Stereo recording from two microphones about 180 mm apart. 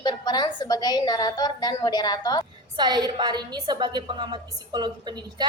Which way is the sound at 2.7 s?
25° right (ahead or behind).